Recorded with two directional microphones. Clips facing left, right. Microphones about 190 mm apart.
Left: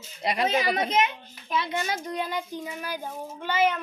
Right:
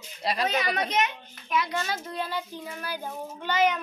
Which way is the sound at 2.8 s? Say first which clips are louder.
Left 1 dB; 10° left (ahead or behind).